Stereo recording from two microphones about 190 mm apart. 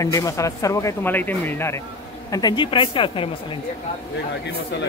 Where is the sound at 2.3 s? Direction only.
25° left (ahead or behind).